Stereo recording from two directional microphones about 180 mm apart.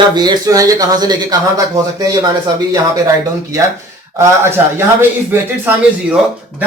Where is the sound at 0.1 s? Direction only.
25° right (ahead or behind).